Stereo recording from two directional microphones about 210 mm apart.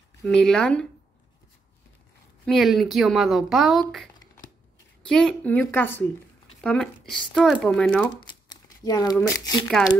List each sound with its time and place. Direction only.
0.2 s speech: 5° left (ahead or behind)
2.4 s a woman's voice: centre (ahead or behind)
8.2 s a sound: 20° left (ahead or behind)
9.1 s a woman's voice: 15° left (ahead or behind)